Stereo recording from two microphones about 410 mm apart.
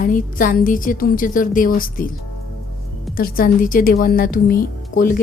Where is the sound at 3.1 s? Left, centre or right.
Left.